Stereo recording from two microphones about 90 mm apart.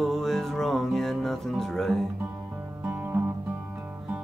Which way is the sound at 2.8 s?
15° right (ahead or behind).